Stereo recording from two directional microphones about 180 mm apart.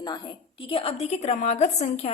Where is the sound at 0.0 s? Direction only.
25° left (ahead or behind).